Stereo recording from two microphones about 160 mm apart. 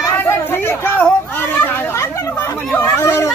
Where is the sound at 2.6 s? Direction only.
15° left (ahead or behind).